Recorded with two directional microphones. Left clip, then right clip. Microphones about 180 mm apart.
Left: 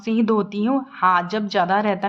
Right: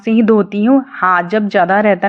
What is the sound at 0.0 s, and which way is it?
A woman's voice, 30° right (ahead or behind).